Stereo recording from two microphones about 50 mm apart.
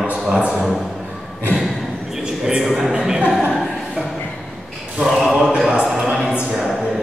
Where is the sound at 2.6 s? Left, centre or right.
Centre.